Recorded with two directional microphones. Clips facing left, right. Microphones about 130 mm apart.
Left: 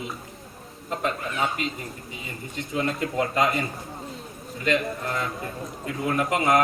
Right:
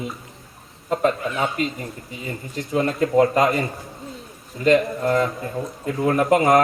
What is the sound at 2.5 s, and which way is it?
Speech, 40° right (ahead or behind).